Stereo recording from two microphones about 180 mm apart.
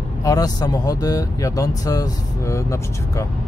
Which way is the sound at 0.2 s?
20° left (ahead or behind).